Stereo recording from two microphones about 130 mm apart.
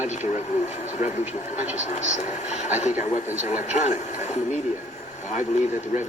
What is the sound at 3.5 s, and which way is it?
Speech, 65° left (ahead or behind).